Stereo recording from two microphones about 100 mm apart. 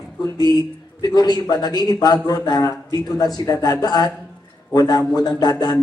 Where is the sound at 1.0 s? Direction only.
45° left (ahead or behind).